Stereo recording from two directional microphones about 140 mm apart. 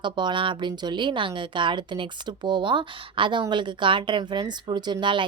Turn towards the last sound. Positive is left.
turn(degrees=-35)  # may be behind; listen again after turning